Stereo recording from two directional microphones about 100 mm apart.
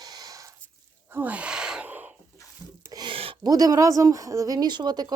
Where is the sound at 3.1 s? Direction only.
70° right (ahead or behind).